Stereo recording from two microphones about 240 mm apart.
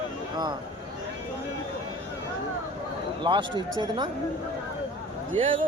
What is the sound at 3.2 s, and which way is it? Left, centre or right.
Speech, centre.